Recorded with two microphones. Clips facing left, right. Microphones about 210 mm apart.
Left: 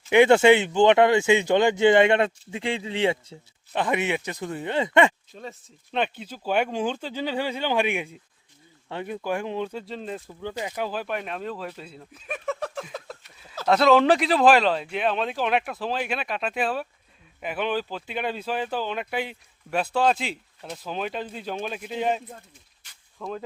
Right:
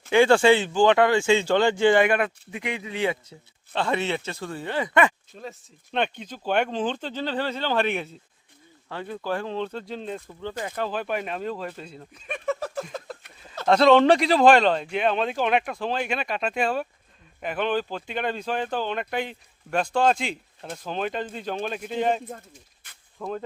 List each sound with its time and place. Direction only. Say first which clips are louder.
0.1 s speech: left 1 dB; 20° left (ahead or behind)
3.7 s speech: left 1 dB; 15° left (ahead or behind)
5.3 s speech: even; centre (ahead or behind)